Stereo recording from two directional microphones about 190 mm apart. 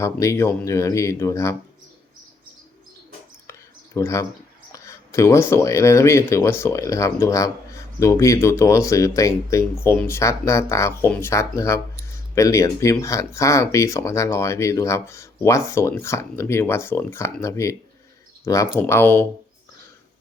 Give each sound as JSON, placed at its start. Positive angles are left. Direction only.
{"t": 0.0, "sound": "speech", "side_deg": 15}
{"t": 3.9, "sound": "speech", "side_deg": 15}